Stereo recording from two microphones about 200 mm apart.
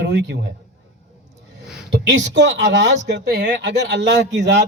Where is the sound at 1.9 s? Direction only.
60° right (ahead or behind).